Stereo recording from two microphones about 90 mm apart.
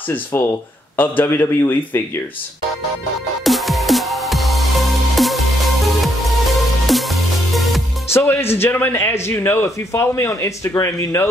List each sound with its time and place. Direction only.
0.1 s a man's voice: 20° left (ahead or behind)
3.4 s music: centre (ahead or behind)
6.9 s music: centre (ahead or behind)
8.1 s a man's voice: 25° left (ahead or behind)